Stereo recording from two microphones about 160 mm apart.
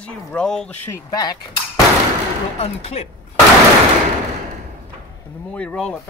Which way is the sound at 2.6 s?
40° left (ahead or behind).